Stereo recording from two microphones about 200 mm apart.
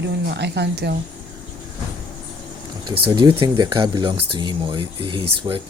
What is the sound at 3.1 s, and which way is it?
Speech, 20° right (ahead or behind).